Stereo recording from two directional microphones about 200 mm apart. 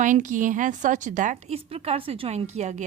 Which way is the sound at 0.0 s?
40° right (ahead or behind).